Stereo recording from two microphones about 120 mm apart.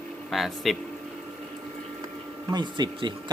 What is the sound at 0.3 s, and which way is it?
Speech, centre (ahead or behind).